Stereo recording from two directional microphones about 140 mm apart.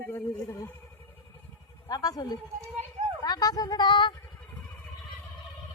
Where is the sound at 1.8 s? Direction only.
25° left (ahead or behind).